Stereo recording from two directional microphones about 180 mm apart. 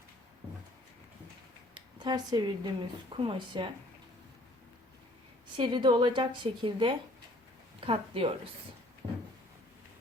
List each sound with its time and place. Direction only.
1.7 s speech: 25° right (ahead or behind)
5.5 s speech: 25° right (ahead or behind)
9.0 s a sound: 10° right (ahead or behind)